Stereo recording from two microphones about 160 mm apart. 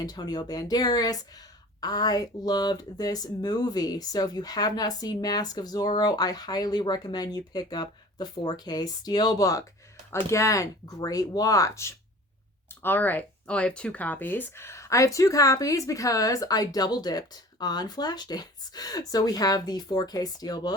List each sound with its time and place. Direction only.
0.0 s speech: 25° left (ahead or behind)